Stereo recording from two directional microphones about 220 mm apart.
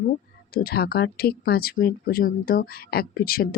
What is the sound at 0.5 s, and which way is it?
Speech, 45° left (ahead or behind).